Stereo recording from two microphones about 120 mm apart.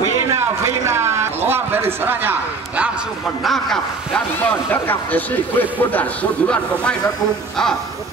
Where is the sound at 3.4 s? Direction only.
Centre (ahead or behind).